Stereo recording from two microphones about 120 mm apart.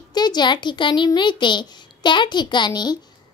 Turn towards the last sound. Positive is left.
turn(degrees=35)  # may be behind; listen again after turning